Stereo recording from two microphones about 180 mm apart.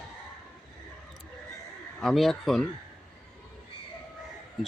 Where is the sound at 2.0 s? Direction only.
Centre (ahead or behind).